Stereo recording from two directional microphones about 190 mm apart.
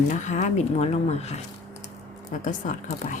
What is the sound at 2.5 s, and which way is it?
Speech, 40° left (ahead or behind).